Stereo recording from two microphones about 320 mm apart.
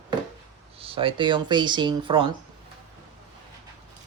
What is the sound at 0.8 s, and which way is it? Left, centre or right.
Speech, centre.